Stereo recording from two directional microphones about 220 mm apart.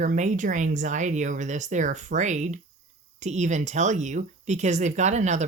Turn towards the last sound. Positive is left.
turn(degrees=-30)  # may be behind; listen again after turning